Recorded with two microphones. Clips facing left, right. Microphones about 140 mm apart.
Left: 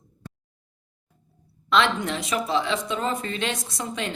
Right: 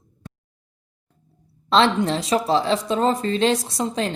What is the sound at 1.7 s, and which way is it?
Speech, 30° right (ahead or behind).